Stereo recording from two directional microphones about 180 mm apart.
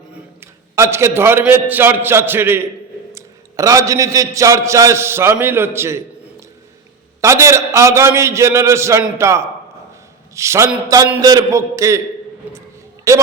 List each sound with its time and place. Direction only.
0.3 s a man's voice: 15° right (ahead or behind)
7.2 s a man's voice: 15° right (ahead or behind)
12.4 s a sound: 10° right (ahead or behind)
13.1 s a man's voice: 15° right (ahead or behind)